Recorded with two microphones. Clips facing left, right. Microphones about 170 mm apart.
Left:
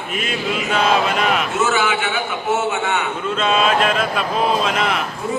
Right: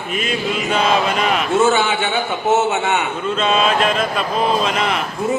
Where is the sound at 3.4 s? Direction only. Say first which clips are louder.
Even; 5° left (ahead or behind).